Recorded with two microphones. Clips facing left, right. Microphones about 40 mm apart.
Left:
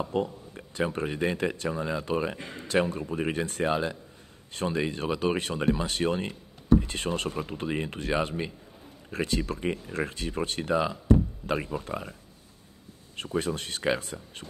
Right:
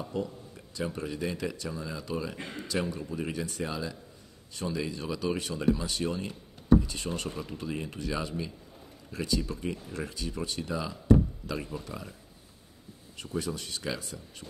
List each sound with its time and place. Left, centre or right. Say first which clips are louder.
0.0 s speech: left 5 dB; left